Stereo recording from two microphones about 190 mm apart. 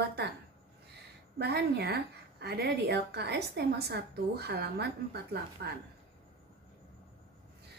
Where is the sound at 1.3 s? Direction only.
55° right (ahead or behind).